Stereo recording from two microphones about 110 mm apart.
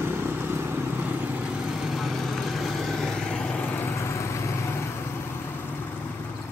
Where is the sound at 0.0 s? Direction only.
20° right (ahead or behind).